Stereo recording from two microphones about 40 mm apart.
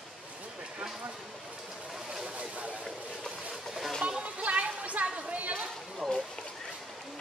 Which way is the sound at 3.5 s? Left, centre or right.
Centre.